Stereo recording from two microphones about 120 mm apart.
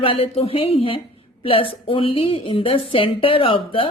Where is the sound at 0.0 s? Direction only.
50° left (ahead or behind).